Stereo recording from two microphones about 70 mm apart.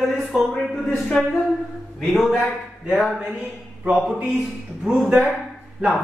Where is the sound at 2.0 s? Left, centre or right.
Centre.